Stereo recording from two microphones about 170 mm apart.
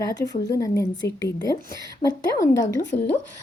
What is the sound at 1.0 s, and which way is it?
Speech, 75° left (ahead or behind).